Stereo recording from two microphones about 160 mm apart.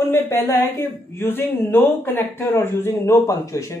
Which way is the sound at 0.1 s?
15° left (ahead or behind).